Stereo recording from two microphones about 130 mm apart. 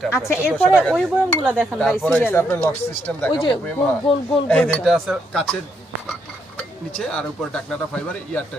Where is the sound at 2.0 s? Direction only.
15° left (ahead or behind).